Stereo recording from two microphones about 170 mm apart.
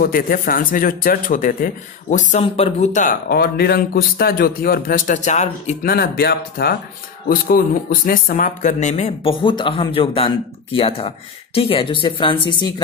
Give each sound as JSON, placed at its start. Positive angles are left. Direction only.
{"t": 0.0, "sound": "speech", "side_deg": 55}
{"t": 3.3, "sound": "a man's voice", "side_deg": 65}
{"t": 5.9, "sound": "a man's voice", "side_deg": 65}